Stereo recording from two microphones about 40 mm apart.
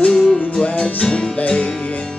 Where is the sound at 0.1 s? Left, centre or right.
Centre.